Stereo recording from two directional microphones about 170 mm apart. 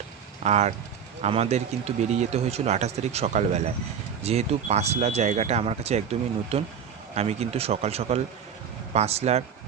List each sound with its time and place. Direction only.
0.4 s speech: 40° right (ahead or behind)